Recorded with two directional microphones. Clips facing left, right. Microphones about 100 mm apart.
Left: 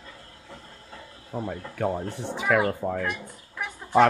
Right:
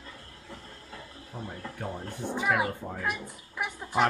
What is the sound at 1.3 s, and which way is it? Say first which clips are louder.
Speech: left 8 dB; 90° left.